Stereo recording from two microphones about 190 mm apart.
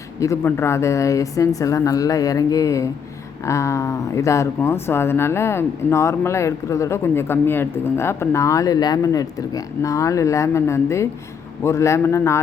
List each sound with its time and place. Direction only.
0.2 s speech: 15° left (ahead or behind)